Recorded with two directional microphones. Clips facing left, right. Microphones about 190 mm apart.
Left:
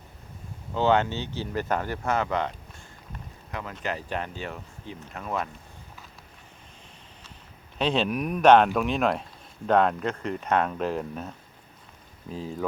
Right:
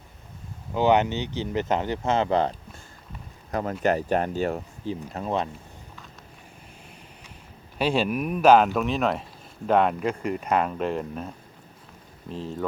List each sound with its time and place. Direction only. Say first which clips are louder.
0.7 s speech: right 2 dB; 15° right (ahead or behind); by 4.9 s 45° right (ahead or behind)
5.1 s speech: right 3 dB; 30° right (ahead or behind)
7.8 s speech: right 1 dB; 5° right (ahead or behind)